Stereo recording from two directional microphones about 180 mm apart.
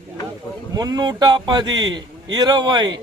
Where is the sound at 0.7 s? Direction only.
20° right (ahead or behind).